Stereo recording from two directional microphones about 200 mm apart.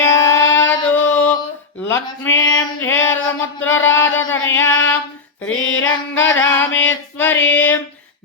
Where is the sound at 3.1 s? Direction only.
75° left (ahead or behind).